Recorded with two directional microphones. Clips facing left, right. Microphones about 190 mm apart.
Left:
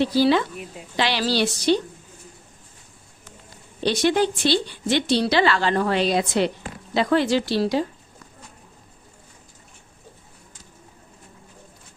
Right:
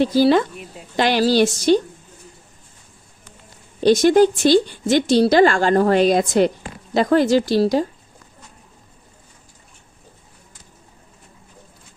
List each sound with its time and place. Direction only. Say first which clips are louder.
0.0 s speech: right 4 dB; 45° right (ahead or behind)
3.8 s speech: right 7 dB; 45° right (ahead or behind)